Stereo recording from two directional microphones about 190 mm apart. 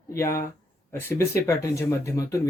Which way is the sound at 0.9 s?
15° left (ahead or behind).